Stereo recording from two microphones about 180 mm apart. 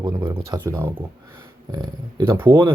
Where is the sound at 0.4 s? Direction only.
20° right (ahead or behind).